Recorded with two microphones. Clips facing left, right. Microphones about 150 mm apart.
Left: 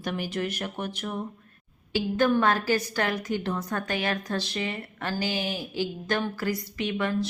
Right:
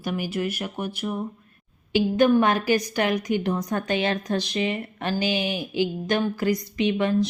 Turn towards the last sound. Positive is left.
turn(degrees=-20)  # may be behind; listen again after turning